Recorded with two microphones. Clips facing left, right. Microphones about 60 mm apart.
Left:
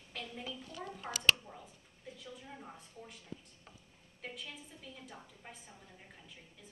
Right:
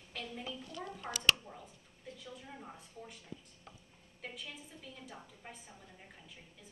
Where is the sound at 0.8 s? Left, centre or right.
Centre.